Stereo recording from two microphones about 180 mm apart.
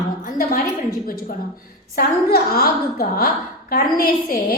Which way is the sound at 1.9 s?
55° left (ahead or behind).